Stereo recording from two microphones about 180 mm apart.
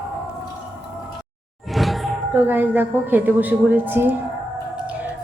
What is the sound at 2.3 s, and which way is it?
A woman's voice, 10° right (ahead or behind).